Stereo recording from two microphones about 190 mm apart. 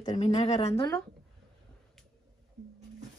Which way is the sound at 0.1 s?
35° left (ahead or behind).